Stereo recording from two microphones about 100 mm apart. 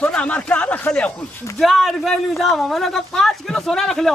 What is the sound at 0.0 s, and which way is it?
Speech, 10° left (ahead or behind).